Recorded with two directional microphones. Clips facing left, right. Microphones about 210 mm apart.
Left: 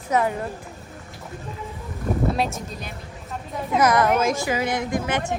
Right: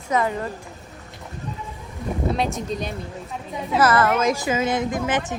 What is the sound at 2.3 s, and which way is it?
Speech, centre (ahead or behind).